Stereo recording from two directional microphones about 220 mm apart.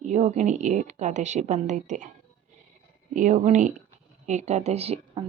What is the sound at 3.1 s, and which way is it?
A woman's voice, 35° right (ahead or behind).